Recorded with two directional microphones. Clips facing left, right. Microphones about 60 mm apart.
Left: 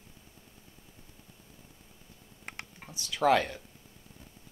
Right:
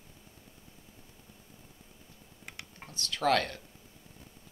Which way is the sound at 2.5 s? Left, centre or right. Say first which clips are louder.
Left 4 dB; left.